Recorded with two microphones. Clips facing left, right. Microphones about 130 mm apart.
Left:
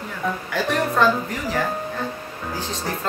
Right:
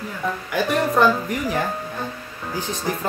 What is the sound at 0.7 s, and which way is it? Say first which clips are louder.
Speech: right 1 dB; 15° right (ahead or behind).